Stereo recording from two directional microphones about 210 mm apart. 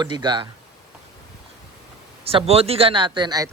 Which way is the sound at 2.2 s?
25° right (ahead or behind).